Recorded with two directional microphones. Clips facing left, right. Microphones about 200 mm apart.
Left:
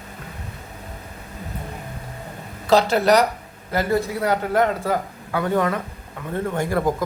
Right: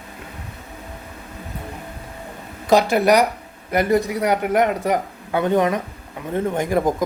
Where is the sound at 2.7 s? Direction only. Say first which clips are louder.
Right 1 dB; 15° right (ahead or behind).